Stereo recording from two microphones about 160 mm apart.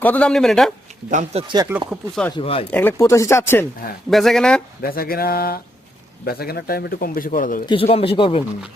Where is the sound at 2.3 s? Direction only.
35° left (ahead or behind).